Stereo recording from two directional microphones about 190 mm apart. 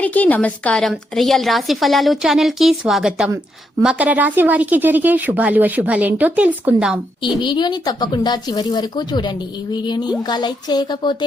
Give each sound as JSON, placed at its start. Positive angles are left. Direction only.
{"t": 0.0, "sound": "a woman's voice", "side_deg": 10}
{"t": 7.4, "sound": "speech", "side_deg": 25}